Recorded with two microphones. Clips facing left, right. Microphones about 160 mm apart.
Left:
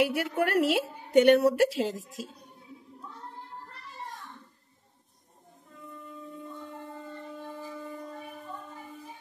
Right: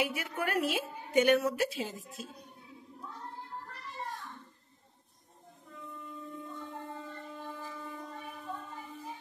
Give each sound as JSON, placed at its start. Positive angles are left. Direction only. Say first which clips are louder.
{"t": 0.0, "sound": "a woman's voice", "louder": "left 7 dB", "side_deg": 70}